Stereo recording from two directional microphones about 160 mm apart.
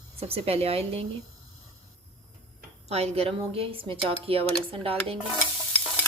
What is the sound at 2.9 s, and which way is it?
Speech, 40° right (ahead or behind).